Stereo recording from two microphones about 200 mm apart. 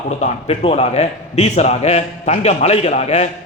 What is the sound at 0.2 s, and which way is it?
A man's voice, 30° left (ahead or behind).